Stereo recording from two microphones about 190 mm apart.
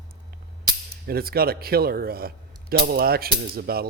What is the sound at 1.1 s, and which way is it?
Speech, 55° right (ahead or behind).